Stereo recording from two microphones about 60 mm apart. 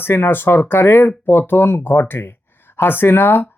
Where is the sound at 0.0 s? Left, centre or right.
Left.